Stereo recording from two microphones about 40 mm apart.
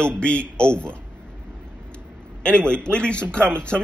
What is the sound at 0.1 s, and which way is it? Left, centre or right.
Speech, left.